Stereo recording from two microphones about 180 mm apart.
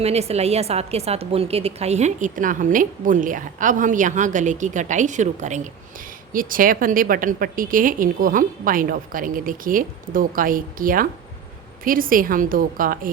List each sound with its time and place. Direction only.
0.0 s a woman's voice: 35° right (ahead or behind); by 13.0 s 50° right (ahead or behind)